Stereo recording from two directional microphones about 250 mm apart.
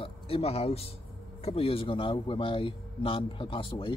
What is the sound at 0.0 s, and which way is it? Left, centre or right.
Speech, left.